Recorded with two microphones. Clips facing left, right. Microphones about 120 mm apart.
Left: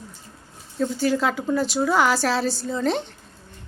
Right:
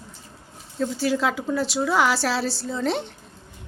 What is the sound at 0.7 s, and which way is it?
A woman's voice, centre (ahead or behind).